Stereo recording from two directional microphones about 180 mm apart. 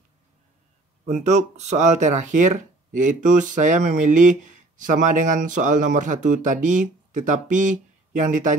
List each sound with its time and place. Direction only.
1.0 s speech: 40° right (ahead or behind)